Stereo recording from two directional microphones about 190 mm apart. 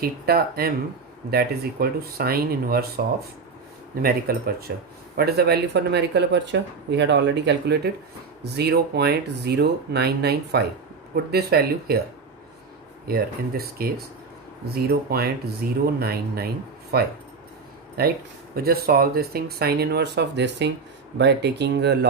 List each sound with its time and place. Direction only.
0.0 s speech: 55° right (ahead or behind)
13.1 s speech: 50° right (ahead or behind)